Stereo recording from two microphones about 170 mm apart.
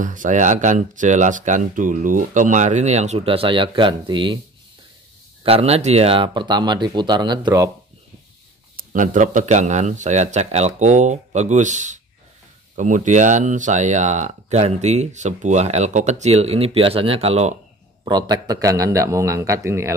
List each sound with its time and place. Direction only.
0.0 s speech: 50° right (ahead or behind); by 4.4 s 30° right (ahead or behind)
5.4 s speech: 35° right (ahead or behind)
8.7 s speech: 50° right (ahead or behind)
18.0 s speech: 25° right (ahead or behind)